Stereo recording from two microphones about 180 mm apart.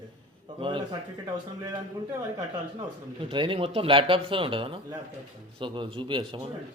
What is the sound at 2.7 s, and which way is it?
A man's voice, 30° right (ahead or behind).